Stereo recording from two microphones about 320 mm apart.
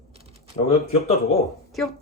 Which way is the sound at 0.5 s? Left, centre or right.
Centre.